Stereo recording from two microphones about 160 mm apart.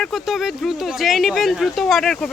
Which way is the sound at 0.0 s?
Centre (ahead or behind).